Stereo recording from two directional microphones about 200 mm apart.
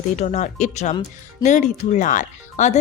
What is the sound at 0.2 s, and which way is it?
Speech, 35° left (ahead or behind).